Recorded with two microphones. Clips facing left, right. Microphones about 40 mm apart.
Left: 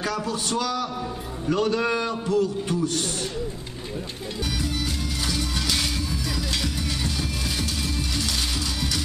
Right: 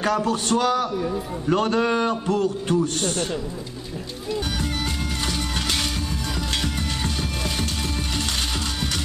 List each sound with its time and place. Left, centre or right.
0.0 s a man's voice: right
5.3 s music: right